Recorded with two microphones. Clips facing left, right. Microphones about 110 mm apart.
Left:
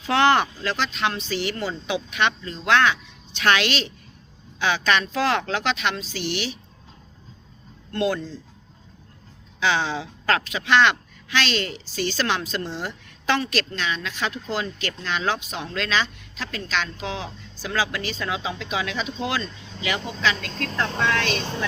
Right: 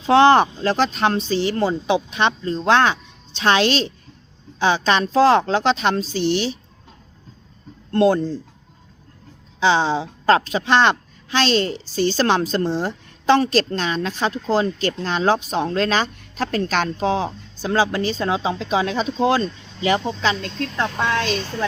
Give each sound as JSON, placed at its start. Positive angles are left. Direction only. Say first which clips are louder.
{"t": 0.0, "sound": "a woman's voice", "louder": "right 6 dB", "side_deg": -30}
{"t": 7.9, "sound": "a woman's voice", "louder": "right 8 dB", "side_deg": -35}
{"t": 9.6, "sound": "a woman's voice", "louder": "right 6 dB", "side_deg": -30}